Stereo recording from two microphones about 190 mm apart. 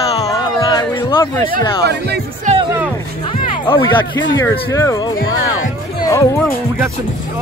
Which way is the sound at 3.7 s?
20° left (ahead or behind).